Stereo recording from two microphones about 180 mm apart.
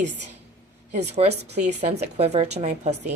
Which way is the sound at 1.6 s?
40° right (ahead or behind).